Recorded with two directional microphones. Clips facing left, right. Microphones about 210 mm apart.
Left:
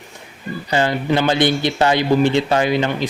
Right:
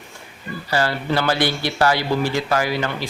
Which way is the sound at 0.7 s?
20° left (ahead or behind).